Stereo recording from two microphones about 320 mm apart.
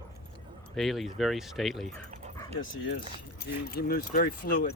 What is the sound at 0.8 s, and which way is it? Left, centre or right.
Speech, centre.